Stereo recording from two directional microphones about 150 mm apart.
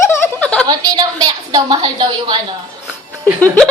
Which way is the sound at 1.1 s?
25° right (ahead or behind).